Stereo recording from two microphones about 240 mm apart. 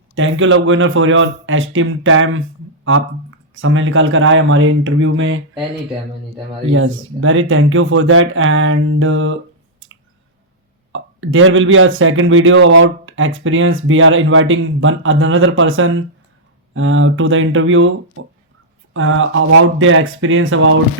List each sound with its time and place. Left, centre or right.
0.2 s speech: right
6.7 s speech: right
10.9 s speech: right